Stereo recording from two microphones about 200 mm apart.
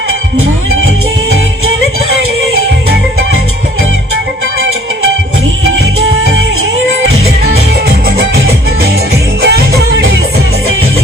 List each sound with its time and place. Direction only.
9.4 s music: 55° right (ahead or behind)